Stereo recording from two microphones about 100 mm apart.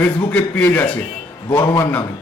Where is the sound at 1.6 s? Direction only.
35° left (ahead or behind).